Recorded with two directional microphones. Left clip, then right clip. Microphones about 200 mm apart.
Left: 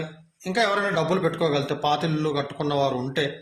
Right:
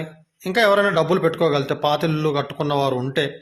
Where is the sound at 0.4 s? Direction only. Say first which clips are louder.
Right 6 dB; 40° right (ahead or behind).